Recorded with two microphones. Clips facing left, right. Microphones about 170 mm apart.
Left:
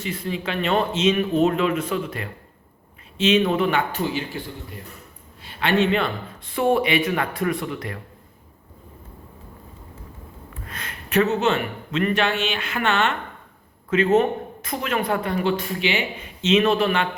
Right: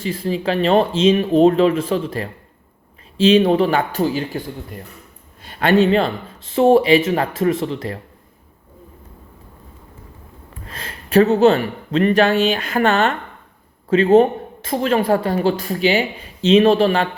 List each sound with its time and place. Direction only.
0.0 s speech: 30° right (ahead or behind)
10.7 s speech: 30° right (ahead or behind)